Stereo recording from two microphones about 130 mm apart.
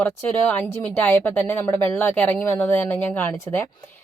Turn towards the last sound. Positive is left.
turn(degrees=20)  # may be behind; listen again after turning